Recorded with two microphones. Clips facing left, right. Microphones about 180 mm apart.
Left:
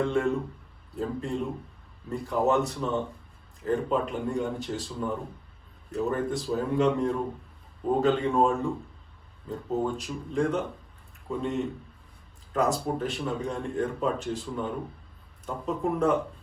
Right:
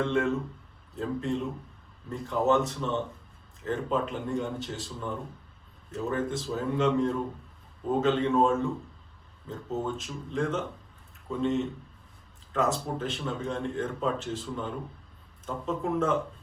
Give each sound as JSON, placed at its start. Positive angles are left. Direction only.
{"t": 0.0, "sound": "speech", "side_deg": 0}
{"t": 10.0, "sound": "speech", "side_deg": 0}
{"t": 12.7, "sound": "speech", "side_deg": 0}